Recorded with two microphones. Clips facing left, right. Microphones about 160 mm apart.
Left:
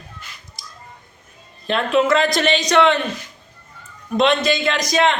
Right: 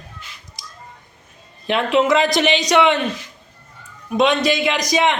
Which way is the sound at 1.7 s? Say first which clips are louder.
Right 1 dB; 15° right (ahead or behind).